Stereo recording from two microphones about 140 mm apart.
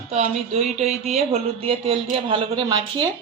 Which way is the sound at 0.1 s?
50° right (ahead or behind).